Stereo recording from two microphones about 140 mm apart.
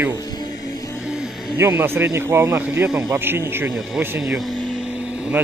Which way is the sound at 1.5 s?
15° right (ahead or behind).